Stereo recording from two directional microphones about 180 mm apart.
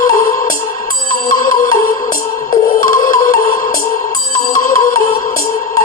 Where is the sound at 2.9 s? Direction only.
50° left (ahead or behind).